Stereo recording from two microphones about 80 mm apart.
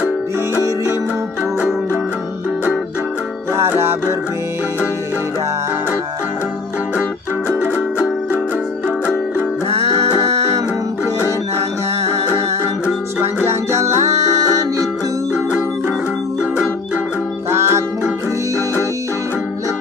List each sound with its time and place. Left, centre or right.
3.5 s music: right
13.5 s music: right
17.5 s music: right